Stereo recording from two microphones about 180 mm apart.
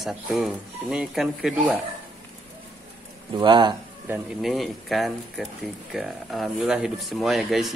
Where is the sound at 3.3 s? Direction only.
25° right (ahead or behind).